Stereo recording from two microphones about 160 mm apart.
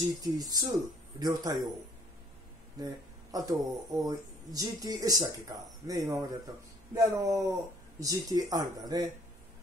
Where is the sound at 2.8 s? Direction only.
20° right (ahead or behind).